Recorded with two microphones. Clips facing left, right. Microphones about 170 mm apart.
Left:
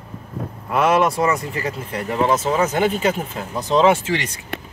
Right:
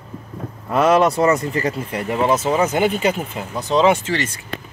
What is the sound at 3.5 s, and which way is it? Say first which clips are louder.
Speech: even; 5° left (ahead or behind).